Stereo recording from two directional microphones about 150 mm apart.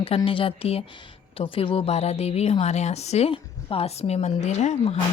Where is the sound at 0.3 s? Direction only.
35° left (ahead or behind).